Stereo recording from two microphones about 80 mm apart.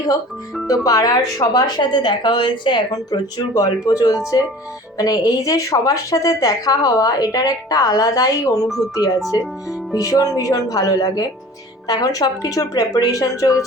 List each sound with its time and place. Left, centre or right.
0.7 s a woman's voice: left
9.4 s speech: centre
10.0 s a woman's voice: left